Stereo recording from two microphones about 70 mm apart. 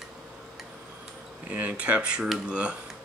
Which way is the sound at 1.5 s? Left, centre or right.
Centre.